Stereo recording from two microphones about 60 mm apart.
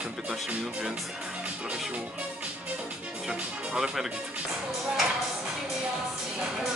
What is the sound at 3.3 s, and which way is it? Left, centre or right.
Speech, centre.